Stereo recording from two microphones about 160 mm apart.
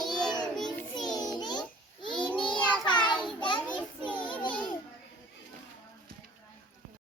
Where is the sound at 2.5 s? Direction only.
30° left (ahead or behind).